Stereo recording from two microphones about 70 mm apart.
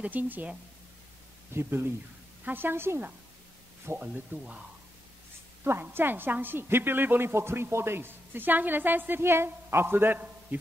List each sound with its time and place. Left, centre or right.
0.0 s speech: right
1.5 s a woman's voice: right
4.0 s speech: right
5.6 s a woman's voice: right